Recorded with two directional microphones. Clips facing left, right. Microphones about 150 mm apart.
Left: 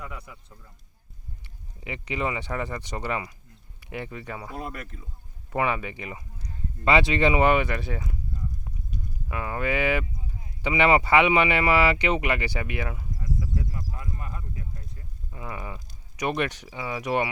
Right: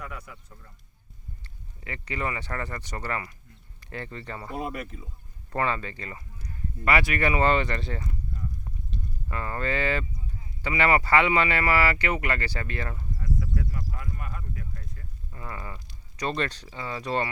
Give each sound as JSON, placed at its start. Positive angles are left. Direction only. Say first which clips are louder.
{"t": 0.0, "sound": "a man's voice", "louder": "even", "side_deg": 20}
{"t": 1.5, "sound": "speech", "louder": "left 3 dB", "side_deg": 15}
{"t": 4.4, "sound": "speech", "louder": "right 6 dB", "side_deg": 0}
{"t": 5.5, "sound": "speech", "louder": "left 2 dB", "side_deg": 15}